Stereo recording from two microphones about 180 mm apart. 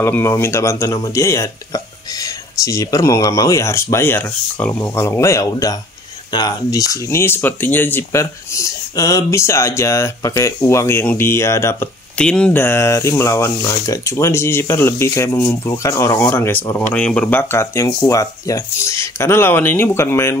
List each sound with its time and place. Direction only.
0.0 s speech: 15° left (ahead or behind)